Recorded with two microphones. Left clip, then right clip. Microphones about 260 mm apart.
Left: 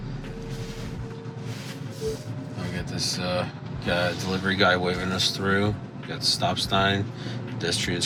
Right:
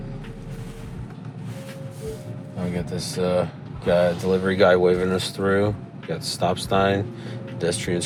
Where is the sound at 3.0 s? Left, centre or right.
Right.